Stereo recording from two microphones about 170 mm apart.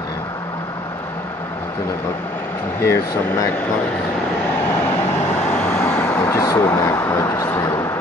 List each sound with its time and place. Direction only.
2.8 s speech: 15° left (ahead or behind)
5.1 s vehicle: 10° left (ahead or behind)